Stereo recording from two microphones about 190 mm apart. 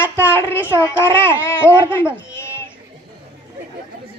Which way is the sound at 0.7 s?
10° left (ahead or behind).